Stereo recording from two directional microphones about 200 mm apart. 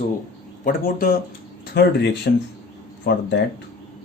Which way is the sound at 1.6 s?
55° left (ahead or behind).